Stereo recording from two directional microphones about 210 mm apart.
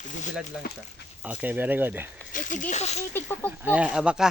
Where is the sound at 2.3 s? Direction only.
40° left (ahead or behind).